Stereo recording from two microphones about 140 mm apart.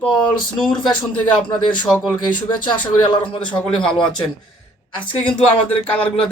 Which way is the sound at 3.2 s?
35° left (ahead or behind).